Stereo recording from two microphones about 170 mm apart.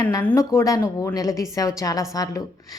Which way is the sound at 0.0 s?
15° left (ahead or behind).